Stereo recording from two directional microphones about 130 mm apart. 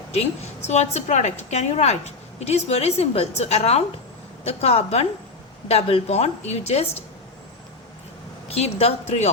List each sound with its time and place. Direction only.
0.1 s a woman's voice: 55° left (ahead or behind)
8.4 s a woman's voice: 55° left (ahead or behind)